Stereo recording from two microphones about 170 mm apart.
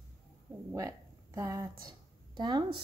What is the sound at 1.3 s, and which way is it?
Speech, 20° right (ahead or behind).